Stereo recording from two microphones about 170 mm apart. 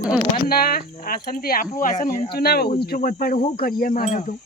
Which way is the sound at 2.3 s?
65° left (ahead or behind).